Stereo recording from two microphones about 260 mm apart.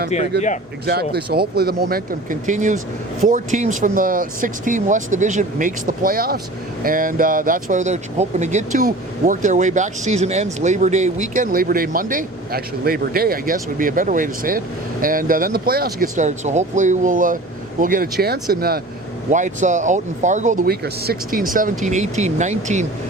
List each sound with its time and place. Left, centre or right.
0.9 s speech: right